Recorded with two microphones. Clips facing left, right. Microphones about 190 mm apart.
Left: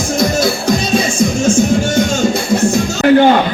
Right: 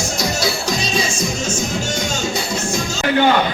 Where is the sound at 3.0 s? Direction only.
50° left (ahead or behind).